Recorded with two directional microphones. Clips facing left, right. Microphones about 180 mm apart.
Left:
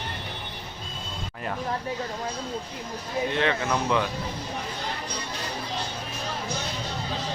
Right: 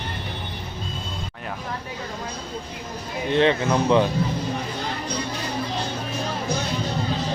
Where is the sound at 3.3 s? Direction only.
25° right (ahead or behind).